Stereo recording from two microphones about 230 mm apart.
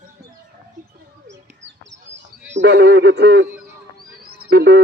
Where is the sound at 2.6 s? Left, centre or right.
Right.